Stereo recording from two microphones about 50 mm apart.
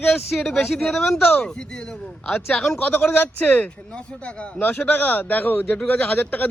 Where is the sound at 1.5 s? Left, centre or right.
Centre.